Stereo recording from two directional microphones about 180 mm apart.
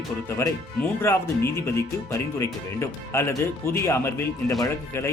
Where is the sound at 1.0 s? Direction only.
15° left (ahead or behind).